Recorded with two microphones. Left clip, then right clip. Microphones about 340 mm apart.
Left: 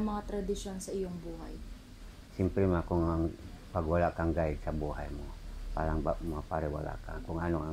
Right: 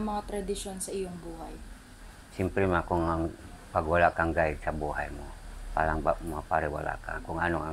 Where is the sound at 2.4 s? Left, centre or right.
Right.